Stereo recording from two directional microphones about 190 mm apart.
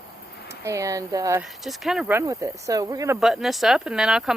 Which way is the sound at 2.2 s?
15° right (ahead or behind).